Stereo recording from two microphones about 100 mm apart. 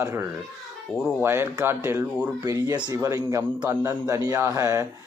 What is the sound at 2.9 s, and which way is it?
A man's voice, 35° right (ahead or behind).